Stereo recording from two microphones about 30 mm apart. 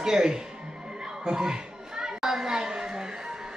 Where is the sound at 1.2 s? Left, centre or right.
Right.